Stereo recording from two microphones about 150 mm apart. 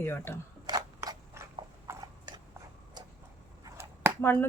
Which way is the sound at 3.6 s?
15° right (ahead or behind).